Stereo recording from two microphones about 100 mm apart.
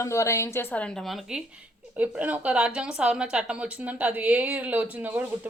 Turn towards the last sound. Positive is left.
turn(degrees=-15)  # may be behind; listen again after turning